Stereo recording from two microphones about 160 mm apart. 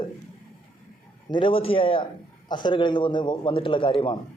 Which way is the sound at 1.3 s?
30° left (ahead or behind).